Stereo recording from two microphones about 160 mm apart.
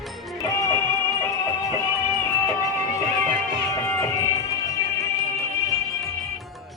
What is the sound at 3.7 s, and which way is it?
Music, 20° left (ahead or behind).